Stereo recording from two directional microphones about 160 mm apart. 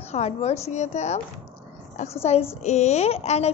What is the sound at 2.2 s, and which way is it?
A woman's voice, 40° left (ahead or behind).